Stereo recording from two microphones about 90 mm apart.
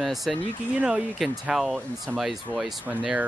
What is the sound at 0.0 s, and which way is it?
Speech, centre (ahead or behind).